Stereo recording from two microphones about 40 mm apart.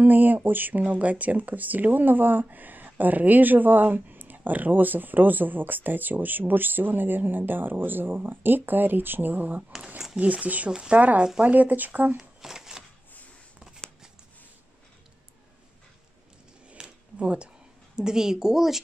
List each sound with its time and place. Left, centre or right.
0.0 s speech: right
10.1 s speech: right
12.2 s a sound: centre
16.8 s a sound: centre
17.2 s speech: right
17.9 s speech: centre